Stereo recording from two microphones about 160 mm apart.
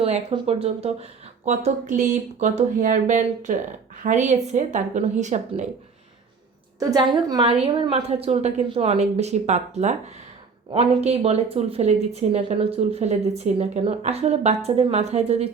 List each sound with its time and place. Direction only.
0.0 s a woman's voice: 40° right (ahead or behind)
6.7 s a woman's voice: 25° right (ahead or behind)